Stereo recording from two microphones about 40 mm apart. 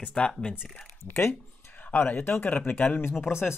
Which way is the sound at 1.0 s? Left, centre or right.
Left.